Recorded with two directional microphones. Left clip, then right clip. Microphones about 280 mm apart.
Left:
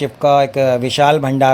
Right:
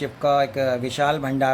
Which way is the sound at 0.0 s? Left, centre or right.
Left.